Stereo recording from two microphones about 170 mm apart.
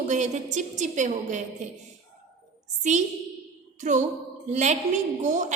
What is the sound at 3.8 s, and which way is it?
A woman's voice, 45° right (ahead or behind).